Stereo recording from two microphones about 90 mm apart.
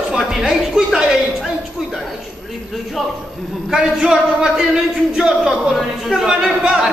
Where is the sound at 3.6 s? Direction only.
5° right (ahead or behind).